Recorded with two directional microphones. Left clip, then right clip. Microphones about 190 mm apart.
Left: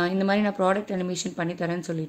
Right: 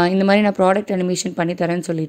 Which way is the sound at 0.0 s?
50° right (ahead or behind).